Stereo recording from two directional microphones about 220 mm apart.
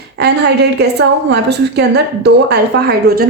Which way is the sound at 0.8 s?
50° right (ahead or behind).